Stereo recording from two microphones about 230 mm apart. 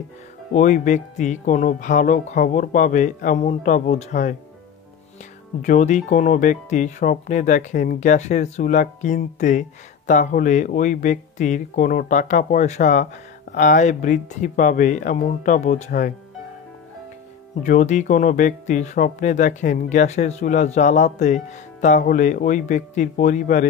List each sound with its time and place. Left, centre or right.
0.5 s speech: left
5.6 s speech: left
17.6 s speech: left